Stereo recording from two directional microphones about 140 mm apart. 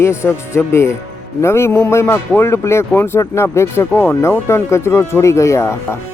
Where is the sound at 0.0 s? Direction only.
20° left (ahead or behind).